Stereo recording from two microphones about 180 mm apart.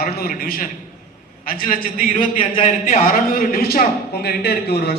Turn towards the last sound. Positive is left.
turn(degrees=60)  # may be behind; listen again after turning